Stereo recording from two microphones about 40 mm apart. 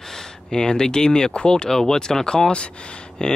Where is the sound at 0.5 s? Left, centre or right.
Centre.